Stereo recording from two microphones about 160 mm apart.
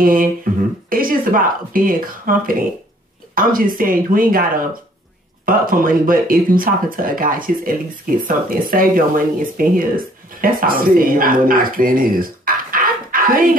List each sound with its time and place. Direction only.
0.0 s speech: 60° right (ahead or behind)